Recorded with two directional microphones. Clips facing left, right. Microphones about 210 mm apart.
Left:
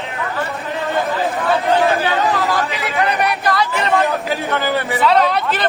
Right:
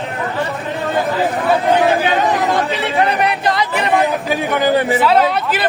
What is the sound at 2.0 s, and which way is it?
Chatter, 20° right (ahead or behind).